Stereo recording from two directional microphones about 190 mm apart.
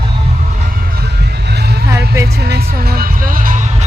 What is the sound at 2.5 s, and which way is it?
Speech, 55° right (ahead or behind).